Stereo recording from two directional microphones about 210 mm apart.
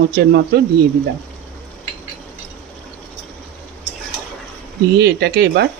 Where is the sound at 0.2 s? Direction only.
50° right (ahead or behind).